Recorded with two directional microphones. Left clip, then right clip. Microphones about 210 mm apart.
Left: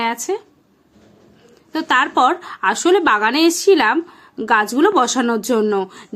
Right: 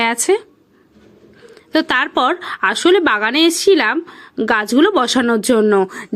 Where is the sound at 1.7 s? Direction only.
20° right (ahead or behind).